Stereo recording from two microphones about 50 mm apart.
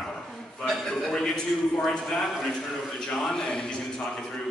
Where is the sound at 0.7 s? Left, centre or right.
Centre.